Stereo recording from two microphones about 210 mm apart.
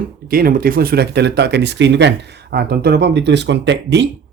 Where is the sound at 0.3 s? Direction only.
45° right (ahead or behind).